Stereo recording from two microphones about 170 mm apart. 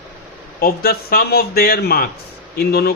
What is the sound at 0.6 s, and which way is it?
A man's voice, 60° left (ahead or behind).